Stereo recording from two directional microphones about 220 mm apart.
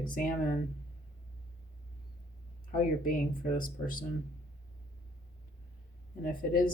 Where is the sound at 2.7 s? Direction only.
40° left (ahead or behind).